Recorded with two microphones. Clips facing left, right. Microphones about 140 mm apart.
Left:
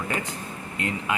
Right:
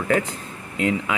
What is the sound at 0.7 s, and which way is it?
Speech, 90° right.